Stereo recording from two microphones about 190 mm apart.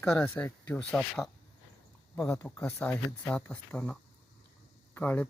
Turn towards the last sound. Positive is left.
turn(degrees=10)  # may be behind; listen again after turning